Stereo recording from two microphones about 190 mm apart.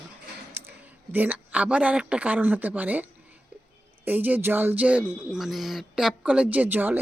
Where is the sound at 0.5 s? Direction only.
10° right (ahead or behind).